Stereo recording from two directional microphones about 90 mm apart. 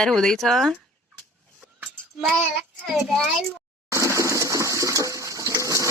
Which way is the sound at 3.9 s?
35° right (ahead or behind).